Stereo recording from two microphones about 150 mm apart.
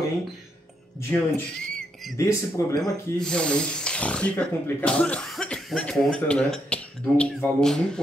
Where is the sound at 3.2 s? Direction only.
5° left (ahead or behind).